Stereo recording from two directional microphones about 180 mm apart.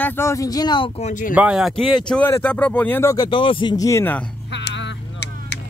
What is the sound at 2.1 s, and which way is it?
A man's voice, 10° left (ahead or behind).